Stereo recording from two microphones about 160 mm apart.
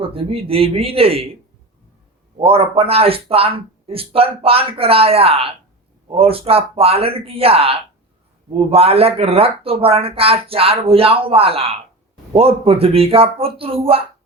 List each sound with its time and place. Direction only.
0.0 s speech: 35° right (ahead or behind)
2.4 s speech: 35° right (ahead or behind)